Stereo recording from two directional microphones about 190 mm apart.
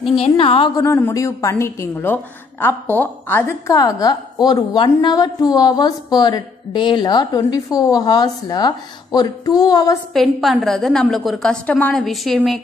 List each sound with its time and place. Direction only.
0.2 s a woman's voice: 30° left (ahead or behind)
0.8 s a woman's voice: 15° left (ahead or behind)
10.1 s a woman's voice: centre (ahead or behind)